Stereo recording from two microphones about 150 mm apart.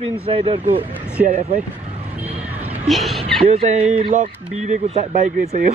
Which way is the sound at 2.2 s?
10° right (ahead or behind).